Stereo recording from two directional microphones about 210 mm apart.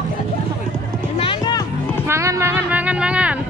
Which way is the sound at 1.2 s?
20° left (ahead or behind).